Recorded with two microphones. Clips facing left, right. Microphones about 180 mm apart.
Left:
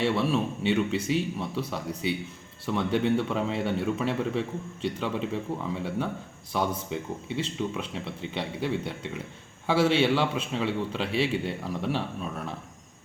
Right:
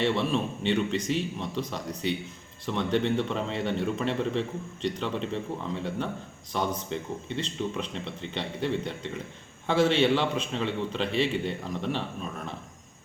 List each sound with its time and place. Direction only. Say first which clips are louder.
0.0 s a man's voice: left 1 dB; 5° left (ahead or behind)